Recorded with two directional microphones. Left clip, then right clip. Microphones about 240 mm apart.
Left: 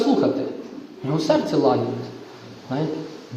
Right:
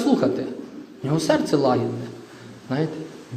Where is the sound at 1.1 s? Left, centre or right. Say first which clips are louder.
Even; right.